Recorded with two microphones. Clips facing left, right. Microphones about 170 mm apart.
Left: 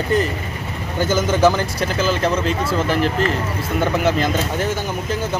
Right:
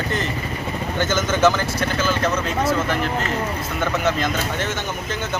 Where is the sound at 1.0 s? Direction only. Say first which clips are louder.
Left 3 dB; 10° left (ahead or behind).